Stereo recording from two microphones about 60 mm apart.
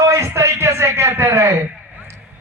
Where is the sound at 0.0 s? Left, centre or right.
Right.